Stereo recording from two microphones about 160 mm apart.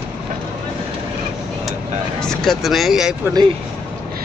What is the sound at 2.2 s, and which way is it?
Speech, centre (ahead or behind).